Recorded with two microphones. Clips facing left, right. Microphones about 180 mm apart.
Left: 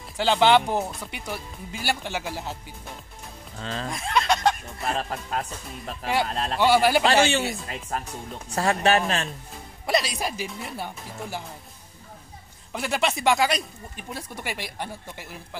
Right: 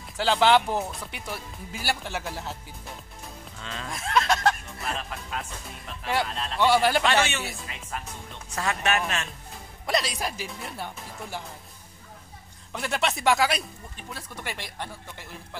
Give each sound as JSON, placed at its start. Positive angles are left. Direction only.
{"t": 0.2, "sound": "speech", "side_deg": 0}
{"t": 3.5, "sound": "speech", "side_deg": 35}
{"t": 3.9, "sound": "speech", "side_deg": 0}
{"t": 4.8, "sound": "speech", "side_deg": 40}
{"t": 6.6, "sound": "speech", "side_deg": 5}
{"t": 7.0, "sound": "speech", "side_deg": 35}
{"t": 9.8, "sound": "speech", "side_deg": 0}
{"t": 12.7, "sound": "speech", "side_deg": 5}
{"t": 13.9, "sound": "speech", "side_deg": 10}